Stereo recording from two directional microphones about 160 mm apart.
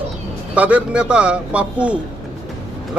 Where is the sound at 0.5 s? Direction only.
10° right (ahead or behind).